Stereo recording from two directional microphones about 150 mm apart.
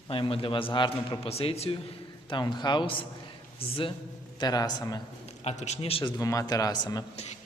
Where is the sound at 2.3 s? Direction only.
30° left (ahead or behind).